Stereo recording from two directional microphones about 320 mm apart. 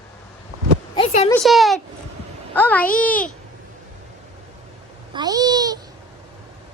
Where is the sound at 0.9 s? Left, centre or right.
Centre.